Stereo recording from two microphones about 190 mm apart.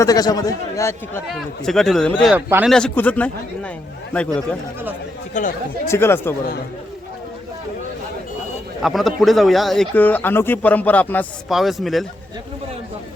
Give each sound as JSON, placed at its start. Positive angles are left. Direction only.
{"t": 0.0, "sound": "a man's voice", "side_deg": 20}
{"t": 1.6, "sound": "speech", "side_deg": 0}
{"t": 2.3, "sound": "speech", "side_deg": -10}
{"t": 2.7, "sound": "a man's voice", "side_deg": 5}
{"t": 5.4, "sound": "speech", "side_deg": 40}
{"t": 5.9, "sound": "a man's voice", "side_deg": 10}
{"t": 8.8, "sound": "speech", "side_deg": 0}